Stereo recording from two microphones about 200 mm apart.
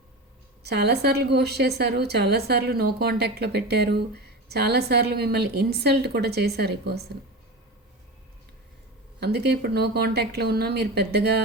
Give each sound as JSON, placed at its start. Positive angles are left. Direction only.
{"t": 0.6, "sound": "a woman's voice", "side_deg": -55}
{"t": 9.2, "sound": "a woman's voice", "side_deg": -55}